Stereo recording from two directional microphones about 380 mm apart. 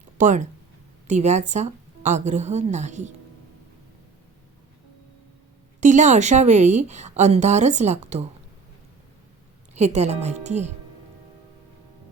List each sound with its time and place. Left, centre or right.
0.2 s a woman's voice: centre
5.8 s a woman's voice: centre
9.7 s a woman's voice: centre